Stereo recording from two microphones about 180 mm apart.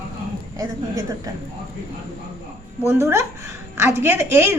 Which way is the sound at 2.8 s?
15° right (ahead or behind).